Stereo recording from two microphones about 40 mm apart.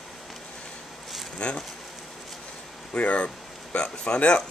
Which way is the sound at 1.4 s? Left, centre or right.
Left.